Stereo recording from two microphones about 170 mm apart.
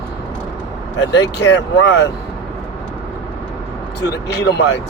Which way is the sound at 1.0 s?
80° left.